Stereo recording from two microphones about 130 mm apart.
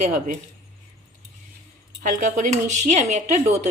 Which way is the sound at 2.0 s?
75° right (ahead or behind).